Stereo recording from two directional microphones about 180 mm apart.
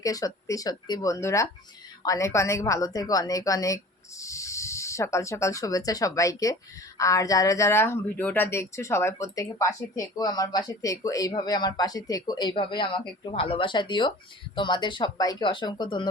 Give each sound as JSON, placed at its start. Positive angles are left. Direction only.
{"t": 0.0, "sound": "speech", "side_deg": 20}